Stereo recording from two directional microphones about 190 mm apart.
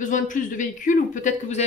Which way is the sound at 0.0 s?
45° left (ahead or behind).